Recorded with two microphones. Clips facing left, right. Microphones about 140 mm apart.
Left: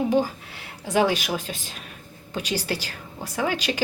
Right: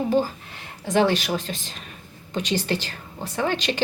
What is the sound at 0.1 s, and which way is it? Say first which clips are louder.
A woman's voice: even; 10° left (ahead or behind).